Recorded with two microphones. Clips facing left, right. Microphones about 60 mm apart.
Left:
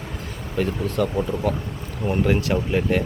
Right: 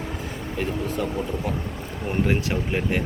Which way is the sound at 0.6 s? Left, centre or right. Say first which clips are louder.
Left 5 dB; centre.